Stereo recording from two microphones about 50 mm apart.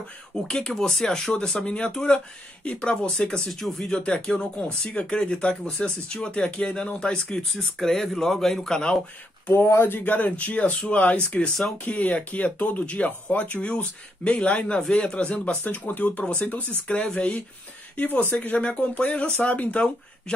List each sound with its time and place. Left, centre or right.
0.5 s speech: centre
4.0 s speech: centre
7.4 s speech: centre
9.7 s speech: left
10.1 s speech: left
11.8 s speech: left
20.3 s speech: centre